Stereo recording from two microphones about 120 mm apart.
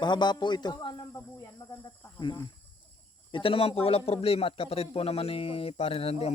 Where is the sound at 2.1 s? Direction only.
40° left (ahead or behind).